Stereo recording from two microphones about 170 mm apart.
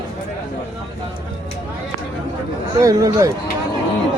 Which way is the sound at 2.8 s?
20° right (ahead or behind).